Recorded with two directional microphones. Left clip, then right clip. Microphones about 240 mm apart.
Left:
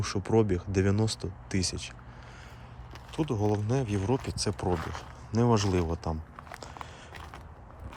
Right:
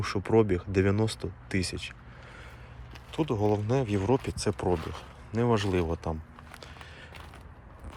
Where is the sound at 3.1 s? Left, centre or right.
Centre.